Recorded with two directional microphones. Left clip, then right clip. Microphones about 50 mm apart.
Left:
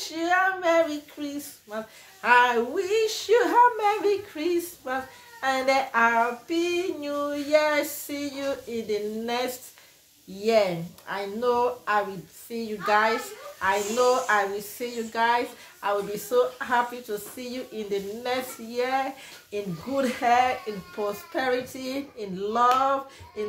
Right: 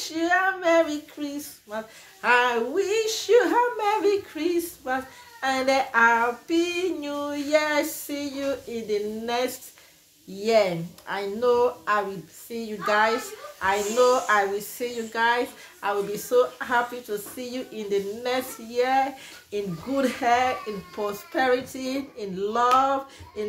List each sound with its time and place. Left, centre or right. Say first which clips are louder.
0.2 s child singing: right 1 dB; centre
1.2 s speech: right 1 dB; right
2.4 s speech: even; centre
3.3 s speech: left 1 dB; centre
3.8 s speech: right 1 dB; right
5.4 s female singing: right 1 dB; right
7.4 s speech: even; right
8.1 s speech: right 1 dB; centre
10.4 s speech: right 1 dB; right
15.8 s speech: even; right
16.3 s speech: right 1 dB; centre
17.7 s speech: right 4 dB; right
22.8 s female singing: right 2 dB; right